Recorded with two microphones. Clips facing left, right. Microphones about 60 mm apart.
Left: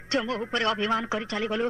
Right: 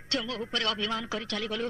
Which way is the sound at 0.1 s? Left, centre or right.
Left.